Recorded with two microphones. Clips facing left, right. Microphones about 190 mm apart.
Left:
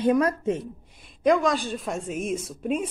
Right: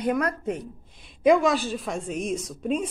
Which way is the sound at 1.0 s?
5° right (ahead or behind).